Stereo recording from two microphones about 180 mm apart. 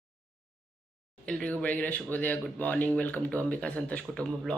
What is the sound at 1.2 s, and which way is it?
Speech, 5° left (ahead or behind).